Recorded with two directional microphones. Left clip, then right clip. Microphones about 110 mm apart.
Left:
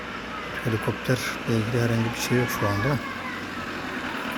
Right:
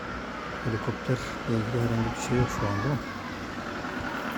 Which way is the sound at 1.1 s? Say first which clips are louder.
Left 5 dB; 15° left (ahead or behind).